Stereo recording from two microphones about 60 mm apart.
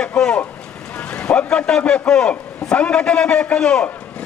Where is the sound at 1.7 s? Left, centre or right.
Centre.